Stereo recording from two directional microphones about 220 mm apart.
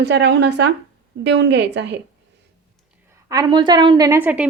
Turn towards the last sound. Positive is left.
turn(degrees=-5)  # may be behind; listen again after turning